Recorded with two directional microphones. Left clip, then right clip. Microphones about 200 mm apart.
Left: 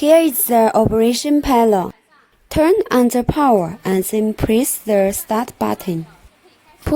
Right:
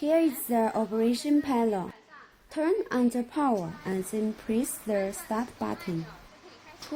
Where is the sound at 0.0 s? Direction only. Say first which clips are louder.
Left 13 dB; 60° left (ahead or behind).